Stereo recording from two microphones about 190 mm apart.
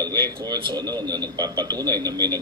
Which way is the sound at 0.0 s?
20° right (ahead or behind).